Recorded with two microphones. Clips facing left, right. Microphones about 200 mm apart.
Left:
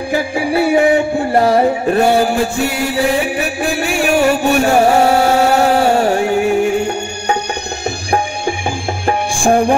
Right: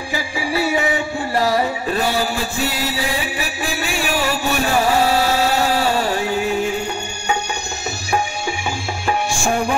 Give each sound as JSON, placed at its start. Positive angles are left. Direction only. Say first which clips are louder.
{"t": 0.1, "sound": "music", "louder": "left 7 dB", "side_deg": 55}
{"t": 9.0, "sound": "music", "louder": "left 5 dB", "side_deg": 55}